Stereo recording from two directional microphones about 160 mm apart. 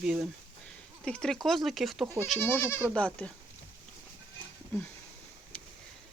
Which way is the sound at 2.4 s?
15° left (ahead or behind).